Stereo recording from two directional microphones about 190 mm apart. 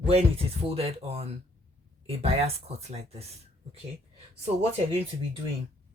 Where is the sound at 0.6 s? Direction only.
30° right (ahead or behind).